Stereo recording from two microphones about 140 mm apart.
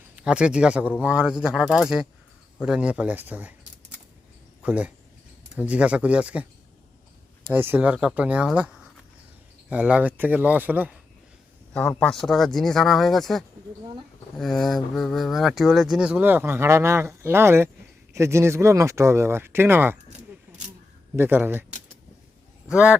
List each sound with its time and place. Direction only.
0.2 s speech: 10° right (ahead or behind)
4.6 s speech: 10° right (ahead or behind)
7.4 s speech: 15° right (ahead or behind)
11.7 s speech: 5° left (ahead or behind); by 20.0 s 15° right (ahead or behind)
21.2 s speech: 15° right (ahead or behind)
22.7 s speech: 10° right (ahead or behind)